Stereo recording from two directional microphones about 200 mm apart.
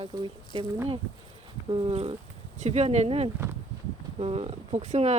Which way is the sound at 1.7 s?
25° right (ahead or behind).